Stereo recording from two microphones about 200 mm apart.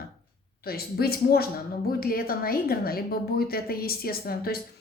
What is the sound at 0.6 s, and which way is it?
A woman's voice, 50° left (ahead or behind).